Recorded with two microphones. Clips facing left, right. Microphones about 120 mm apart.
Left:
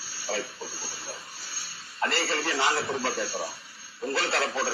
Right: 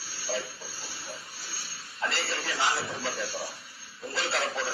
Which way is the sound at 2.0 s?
55° left (ahead or behind).